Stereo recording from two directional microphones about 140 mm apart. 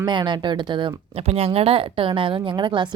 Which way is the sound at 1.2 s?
45° right (ahead or behind).